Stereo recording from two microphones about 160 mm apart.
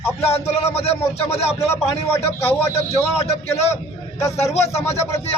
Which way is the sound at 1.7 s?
15° left (ahead or behind).